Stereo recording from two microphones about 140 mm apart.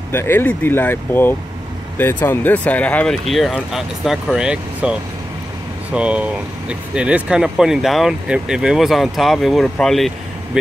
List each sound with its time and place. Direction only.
0.1 s speech: 15° left (ahead or behind); by 4.9 s 5° right (ahead or behind)
5.9 s speech: 10° right (ahead or behind)